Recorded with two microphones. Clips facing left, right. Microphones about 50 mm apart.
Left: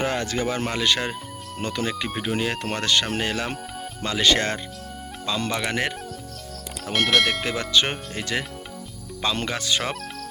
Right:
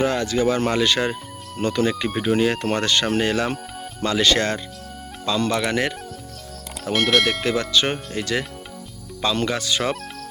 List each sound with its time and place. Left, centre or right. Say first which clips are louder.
0.0 s speech: right 4 dB; left
0.6 s speech: right 4 dB; centre
4.0 s speech: right 2 dB; centre
6.8 s speech: right 2 dB; centre
9.2 s speech: right 4 dB; centre